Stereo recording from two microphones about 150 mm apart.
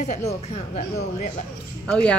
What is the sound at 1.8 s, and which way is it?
Speech, 5° left (ahead or behind).